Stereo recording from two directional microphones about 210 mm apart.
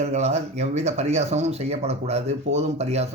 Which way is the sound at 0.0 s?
30° right (ahead or behind).